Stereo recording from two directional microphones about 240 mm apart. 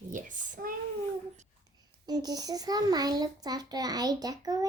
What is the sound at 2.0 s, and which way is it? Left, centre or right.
A child's voice, centre.